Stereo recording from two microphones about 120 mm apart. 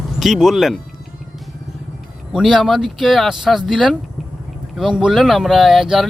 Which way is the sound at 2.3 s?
5° right (ahead or behind).